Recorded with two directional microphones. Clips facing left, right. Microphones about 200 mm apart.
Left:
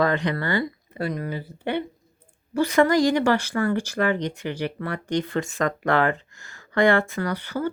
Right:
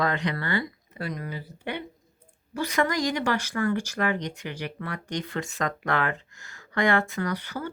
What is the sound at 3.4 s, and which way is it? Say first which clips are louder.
Speech: left 3 dB; 30° left (ahead or behind).